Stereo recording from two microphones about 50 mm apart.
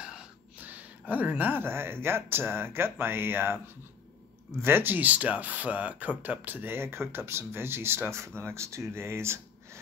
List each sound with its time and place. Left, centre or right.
0.0 s gasp: centre
0.6 s a sound: right
1.6 s speech: right
8.4 s speech: right